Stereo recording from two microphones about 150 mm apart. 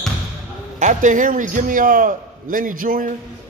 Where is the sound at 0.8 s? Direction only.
55° right (ahead or behind).